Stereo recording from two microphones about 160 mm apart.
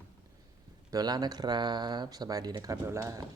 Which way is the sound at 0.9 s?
25° right (ahead or behind).